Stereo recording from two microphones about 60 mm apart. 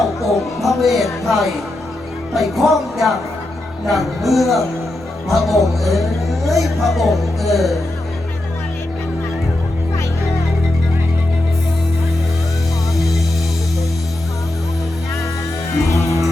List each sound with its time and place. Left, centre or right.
0.0 s a sound: centre
0.6 s speech: centre
15.9 s music: left